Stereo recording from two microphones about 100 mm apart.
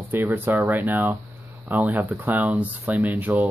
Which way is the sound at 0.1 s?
20° right (ahead or behind).